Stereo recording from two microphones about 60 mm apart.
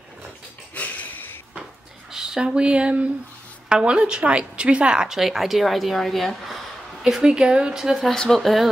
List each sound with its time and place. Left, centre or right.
0.7 s a sound: left
2.1 s a woman's voice: centre
7.0 s a woman's voice: centre
8.0 s speech: centre